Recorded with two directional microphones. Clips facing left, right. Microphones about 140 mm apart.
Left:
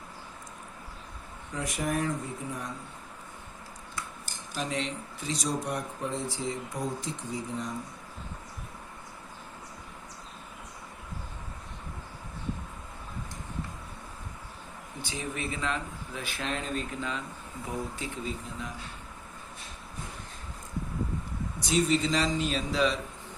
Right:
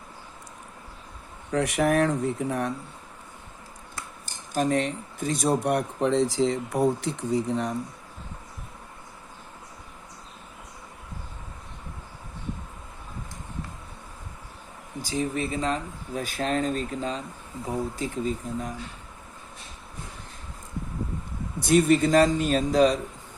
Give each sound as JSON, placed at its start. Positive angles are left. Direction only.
{"t": 1.5, "sound": "speech", "side_deg": -70}
{"t": 4.5, "sound": "speech", "side_deg": -50}
{"t": 15.0, "sound": "speech", "side_deg": -40}
{"t": 21.6, "sound": "speech", "side_deg": -55}